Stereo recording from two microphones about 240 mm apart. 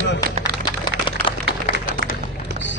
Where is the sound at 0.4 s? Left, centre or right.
Centre.